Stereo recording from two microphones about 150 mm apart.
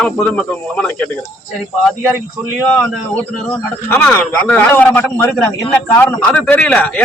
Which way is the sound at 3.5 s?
10° left (ahead or behind).